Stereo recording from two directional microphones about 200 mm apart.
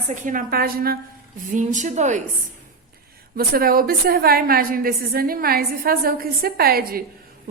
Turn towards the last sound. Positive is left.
turn(degrees=-50)  # may be behind; listen again after turning